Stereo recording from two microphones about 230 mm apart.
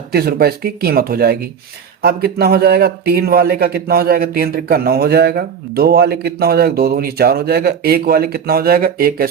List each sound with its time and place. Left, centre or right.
0.1 s a man's voice: right